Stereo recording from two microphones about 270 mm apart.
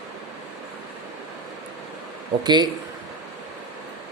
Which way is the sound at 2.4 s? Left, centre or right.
Centre.